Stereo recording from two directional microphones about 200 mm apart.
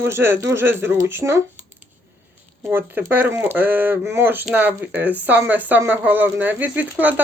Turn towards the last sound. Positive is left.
turn(degrees=-10)  # may be behind; listen again after turning